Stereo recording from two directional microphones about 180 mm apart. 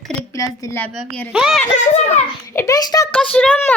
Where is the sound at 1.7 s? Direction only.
40° left (ahead or behind).